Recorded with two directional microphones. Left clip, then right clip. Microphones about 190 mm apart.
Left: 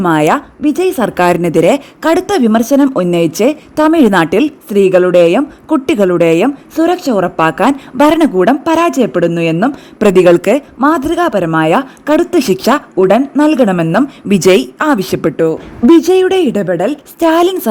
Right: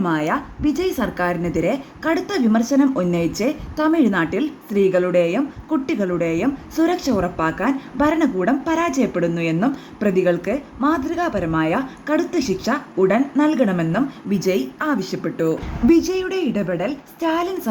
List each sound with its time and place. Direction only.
0.0 s a woman's voice: 50° left (ahead or behind)
6.7 s a woman's voice: 40° left (ahead or behind)
10.0 s a woman's voice: 55° left (ahead or behind)
10.8 s a woman's voice: 45° left (ahead or behind)